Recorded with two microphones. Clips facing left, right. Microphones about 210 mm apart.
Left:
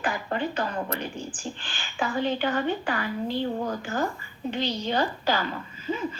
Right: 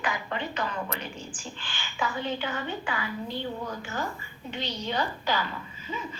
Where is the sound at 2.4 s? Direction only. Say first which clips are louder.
Left 7 dB; 50° left (ahead or behind).